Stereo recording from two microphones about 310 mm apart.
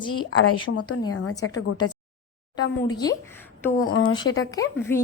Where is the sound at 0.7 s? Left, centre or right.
Left.